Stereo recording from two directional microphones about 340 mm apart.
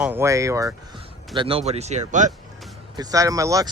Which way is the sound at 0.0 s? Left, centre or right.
Centre.